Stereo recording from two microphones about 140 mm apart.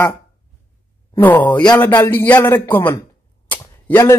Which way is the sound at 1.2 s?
15° left (ahead or behind).